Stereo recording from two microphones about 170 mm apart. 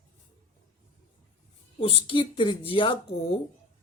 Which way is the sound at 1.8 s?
35° left (ahead or behind).